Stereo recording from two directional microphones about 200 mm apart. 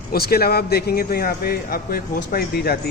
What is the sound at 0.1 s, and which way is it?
A man's voice, 50° left (ahead or behind).